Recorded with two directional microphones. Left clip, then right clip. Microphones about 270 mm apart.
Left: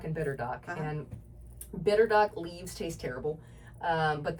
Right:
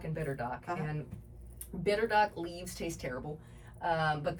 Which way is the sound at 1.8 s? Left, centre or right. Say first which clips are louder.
Left 4 dB; centre.